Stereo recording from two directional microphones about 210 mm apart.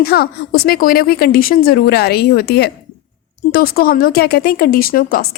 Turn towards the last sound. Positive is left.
turn(degrees=45)  # may be behind; listen again after turning